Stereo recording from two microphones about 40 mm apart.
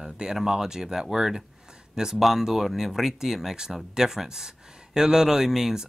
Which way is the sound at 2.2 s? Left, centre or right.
Centre.